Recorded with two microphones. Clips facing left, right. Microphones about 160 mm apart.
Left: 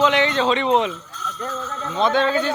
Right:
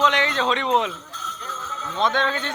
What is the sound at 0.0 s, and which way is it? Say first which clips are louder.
Speech: left 4 dB; centre (ahead or behind).